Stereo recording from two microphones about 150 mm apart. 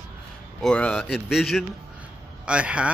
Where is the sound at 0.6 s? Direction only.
5° left (ahead or behind).